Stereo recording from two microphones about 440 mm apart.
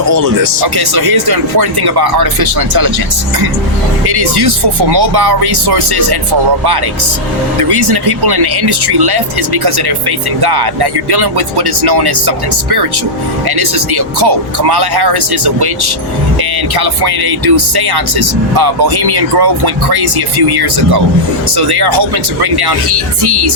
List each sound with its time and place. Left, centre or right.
0.0 s speech: right
4.0 s speech: right
7.7 s speech: right
13.6 s speech: right